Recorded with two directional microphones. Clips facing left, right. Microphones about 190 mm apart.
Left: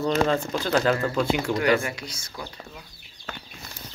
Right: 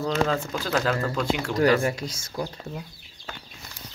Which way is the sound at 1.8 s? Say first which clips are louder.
Right 5 dB; 40° right (ahead or behind).